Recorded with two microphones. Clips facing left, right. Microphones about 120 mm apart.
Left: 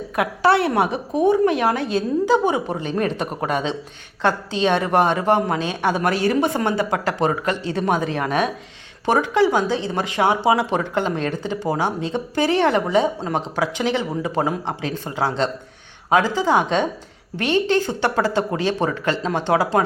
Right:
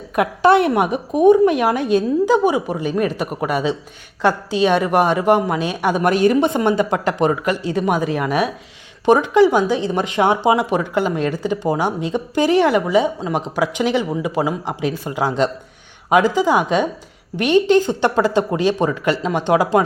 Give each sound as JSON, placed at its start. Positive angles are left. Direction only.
{"t": 0.2, "sound": "a woman's voice", "side_deg": -20}
{"t": 13.6, "sound": "a woman's voice", "side_deg": -15}